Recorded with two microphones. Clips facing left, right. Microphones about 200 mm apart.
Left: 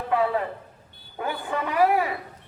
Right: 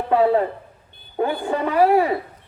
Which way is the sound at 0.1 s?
30° right (ahead or behind).